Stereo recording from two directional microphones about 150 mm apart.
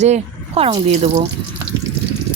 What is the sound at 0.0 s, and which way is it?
Speech, 45° right (ahead or behind).